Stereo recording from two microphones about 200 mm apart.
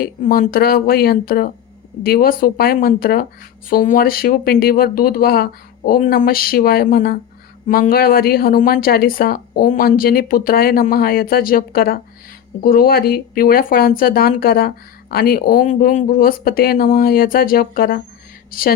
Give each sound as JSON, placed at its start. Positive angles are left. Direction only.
{"t": 0.0, "sound": "speech", "side_deg": 45}